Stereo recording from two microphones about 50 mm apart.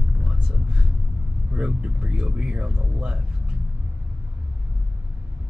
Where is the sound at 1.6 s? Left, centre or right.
Right.